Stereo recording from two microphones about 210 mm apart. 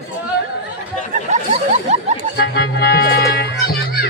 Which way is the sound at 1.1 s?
35° right (ahead or behind).